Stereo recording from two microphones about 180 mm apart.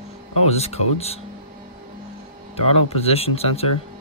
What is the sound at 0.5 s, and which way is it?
Speech, 35° left (ahead or behind).